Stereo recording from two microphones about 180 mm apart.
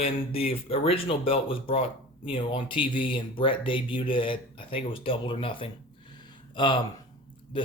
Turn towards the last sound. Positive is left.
turn(degrees=30)  # may be behind; listen again after turning